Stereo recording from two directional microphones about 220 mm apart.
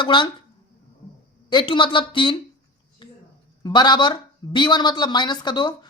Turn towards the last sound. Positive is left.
turn(degrees=20)  # may be behind; listen again after turning